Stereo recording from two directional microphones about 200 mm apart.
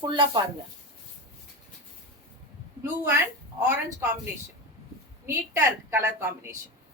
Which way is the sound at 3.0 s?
15° right (ahead or behind).